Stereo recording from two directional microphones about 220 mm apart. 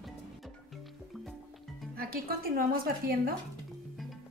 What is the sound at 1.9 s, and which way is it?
Music, 40° right (ahead or behind).